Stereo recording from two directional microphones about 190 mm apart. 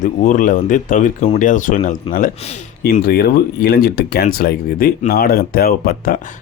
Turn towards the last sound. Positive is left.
turn(degrees=50)  # may be behind; listen again after turning